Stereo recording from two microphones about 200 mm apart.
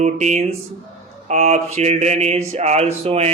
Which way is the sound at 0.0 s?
35° right (ahead or behind).